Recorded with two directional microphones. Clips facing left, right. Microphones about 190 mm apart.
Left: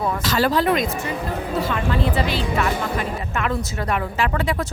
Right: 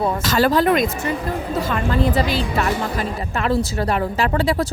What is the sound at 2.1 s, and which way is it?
Speech, 40° right (ahead or behind).